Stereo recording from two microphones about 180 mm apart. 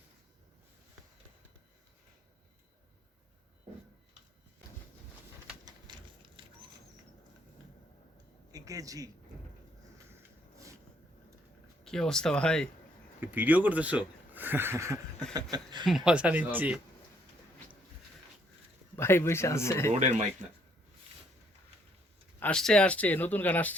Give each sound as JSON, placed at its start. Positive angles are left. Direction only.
{"t": 5.6, "sound": "a sound", "side_deg": -25}
{"t": 8.5, "sound": "a man's voice", "side_deg": -20}
{"t": 11.8, "sound": "speech", "side_deg": 5}
{"t": 13.1, "sound": "speech", "side_deg": -10}
{"t": 15.9, "sound": "speech", "side_deg": -5}
{"t": 18.9, "sound": "speech", "side_deg": 15}
{"t": 19.9, "sound": "speech", "side_deg": -40}
{"t": 22.4, "sound": "speech", "side_deg": 5}